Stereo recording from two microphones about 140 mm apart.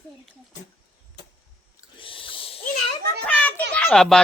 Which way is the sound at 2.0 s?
40° left (ahead or behind).